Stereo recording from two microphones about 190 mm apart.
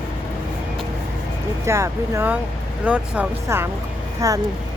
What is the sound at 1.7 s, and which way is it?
A woman's voice, 15° right (ahead or behind).